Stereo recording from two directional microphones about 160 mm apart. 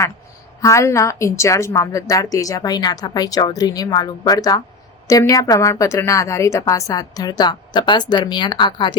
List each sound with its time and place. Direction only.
0.6 s a woman's voice: 20° left (ahead or behind)